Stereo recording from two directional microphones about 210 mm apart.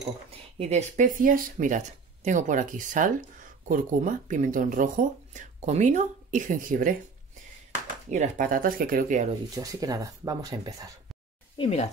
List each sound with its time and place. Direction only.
0.6 s speech: 30° right (ahead or behind)
8.1 s speech: 35° right (ahead or behind)
9.5 s speech: 15° right (ahead or behind)
11.5 s speech: 25° left (ahead or behind)